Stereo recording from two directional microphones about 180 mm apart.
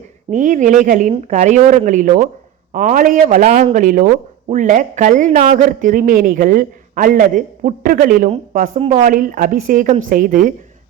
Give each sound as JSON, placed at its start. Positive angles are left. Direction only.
{"t": 0.3, "sound": "speech", "side_deg": -45}